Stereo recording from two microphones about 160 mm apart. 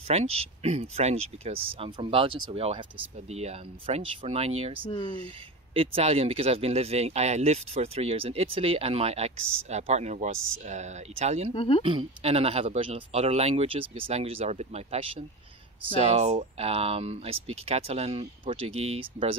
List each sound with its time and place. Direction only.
0.1 s speech: 40° right (ahead or behind)
5.9 s speech: 40° right (ahead or behind)
11.5 s speech: 35° left (ahead or behind)
11.8 s speech: 35° right (ahead or behind)